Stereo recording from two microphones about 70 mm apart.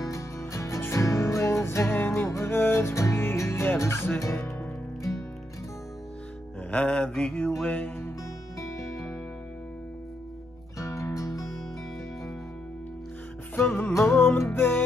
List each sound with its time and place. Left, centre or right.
0.1 s music: left
6.7 s mantra: centre
7.6 s music: left
10.8 s music: left
13.6 s music: left